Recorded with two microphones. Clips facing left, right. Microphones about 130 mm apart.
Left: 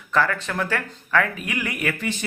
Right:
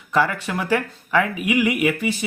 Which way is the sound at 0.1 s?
15° right (ahead or behind).